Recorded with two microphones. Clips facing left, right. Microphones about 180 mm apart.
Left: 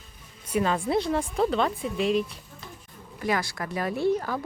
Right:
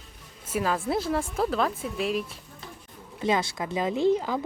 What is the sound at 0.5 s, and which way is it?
A woman's voice, 5° right (ahead or behind).